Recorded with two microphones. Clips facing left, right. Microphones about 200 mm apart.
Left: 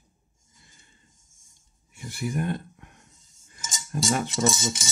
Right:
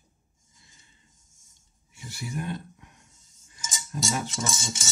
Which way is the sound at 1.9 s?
55° left (ahead or behind).